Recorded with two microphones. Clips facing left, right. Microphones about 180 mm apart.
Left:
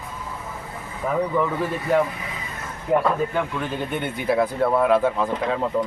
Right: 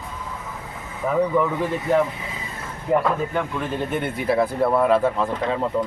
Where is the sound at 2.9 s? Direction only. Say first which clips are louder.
Even; centre (ahead or behind).